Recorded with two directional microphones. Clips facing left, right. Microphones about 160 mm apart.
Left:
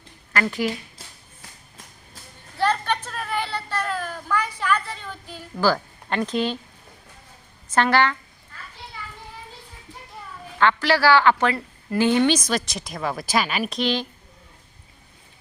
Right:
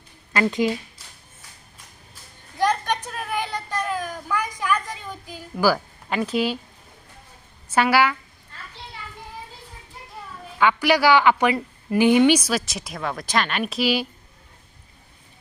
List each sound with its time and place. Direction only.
0.3 s speech: 20° right (ahead or behind)
2.6 s a sound: 15° right (ahead or behind)
7.7 s a woman's voice: 10° right (ahead or behind)
10.6 s a woman's voice: 15° right (ahead or behind)